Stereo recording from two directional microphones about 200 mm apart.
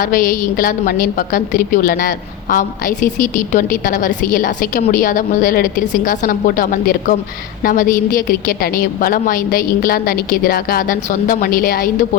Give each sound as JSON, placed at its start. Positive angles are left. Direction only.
{"t": 0.0, "sound": "a woman's voice", "side_deg": 45}